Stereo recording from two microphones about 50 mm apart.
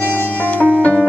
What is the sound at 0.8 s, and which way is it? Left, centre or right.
Music, left.